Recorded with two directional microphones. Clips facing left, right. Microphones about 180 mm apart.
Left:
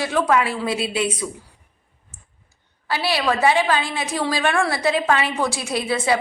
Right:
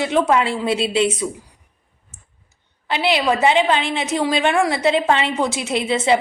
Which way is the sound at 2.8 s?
20° right (ahead or behind).